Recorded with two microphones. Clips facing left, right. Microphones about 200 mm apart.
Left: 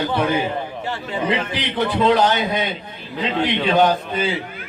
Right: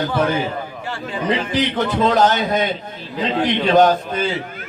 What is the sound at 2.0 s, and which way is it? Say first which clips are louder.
Speech: right 1 dB; 45° right (ahead or behind).